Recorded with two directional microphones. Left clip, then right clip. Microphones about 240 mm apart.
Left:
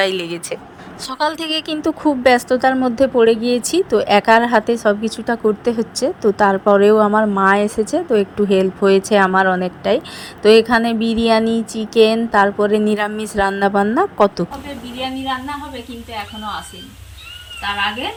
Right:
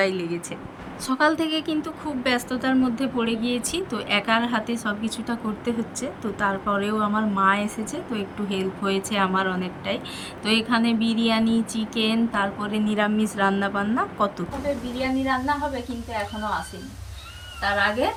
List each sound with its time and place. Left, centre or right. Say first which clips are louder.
0.0 s a woman's voice: left 6 dB; left